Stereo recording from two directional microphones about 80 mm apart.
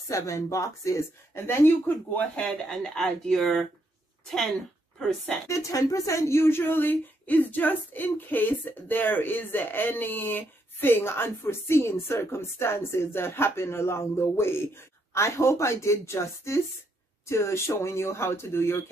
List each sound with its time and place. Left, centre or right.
0.1 s speech: left
2.7 s speech: centre
4.9 s a woman's voice: centre
5.5 s speech: left